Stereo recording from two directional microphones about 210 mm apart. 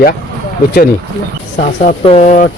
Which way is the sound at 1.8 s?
35° left (ahead or behind).